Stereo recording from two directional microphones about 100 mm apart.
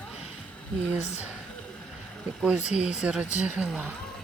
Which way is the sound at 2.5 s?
10° right (ahead or behind).